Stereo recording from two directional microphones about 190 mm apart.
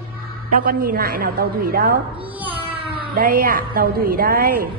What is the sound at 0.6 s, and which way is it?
A woman's voice, 50° right (ahead or behind).